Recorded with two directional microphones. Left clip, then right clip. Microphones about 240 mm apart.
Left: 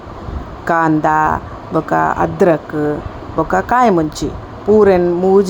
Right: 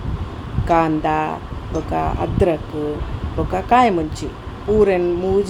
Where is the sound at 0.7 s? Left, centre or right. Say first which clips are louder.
Left 4 dB; left.